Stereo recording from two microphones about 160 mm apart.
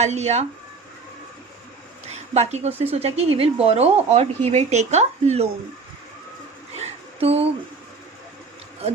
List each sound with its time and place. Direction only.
0.0 s speech: 45° right (ahead or behind)
2.0 s a woman's voice: 45° right (ahead or behind)
6.7 s a sound: 40° right (ahead or behind)